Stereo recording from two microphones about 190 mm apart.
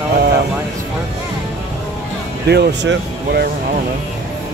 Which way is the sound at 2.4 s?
60° right (ahead or behind).